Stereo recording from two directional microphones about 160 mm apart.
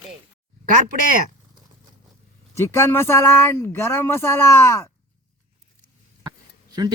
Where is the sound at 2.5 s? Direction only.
15° left (ahead or behind).